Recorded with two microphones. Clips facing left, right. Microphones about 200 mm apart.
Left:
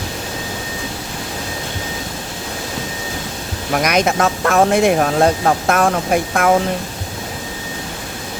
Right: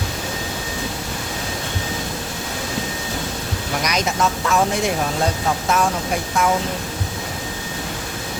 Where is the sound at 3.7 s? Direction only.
60° left (ahead or behind).